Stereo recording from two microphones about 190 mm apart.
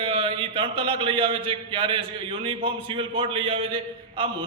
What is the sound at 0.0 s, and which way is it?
A man's voice, 30° right (ahead or behind).